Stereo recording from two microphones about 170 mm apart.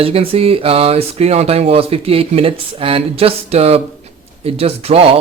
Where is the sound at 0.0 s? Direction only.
35° right (ahead or behind).